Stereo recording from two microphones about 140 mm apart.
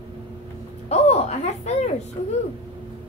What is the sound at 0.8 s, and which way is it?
A woman's voice, 50° left (ahead or behind).